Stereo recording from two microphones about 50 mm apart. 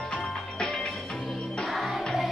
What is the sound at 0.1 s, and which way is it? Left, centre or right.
Music, centre.